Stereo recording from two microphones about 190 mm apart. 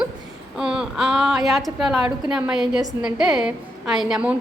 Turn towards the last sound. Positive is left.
turn(degrees=-5)  # may be behind; listen again after turning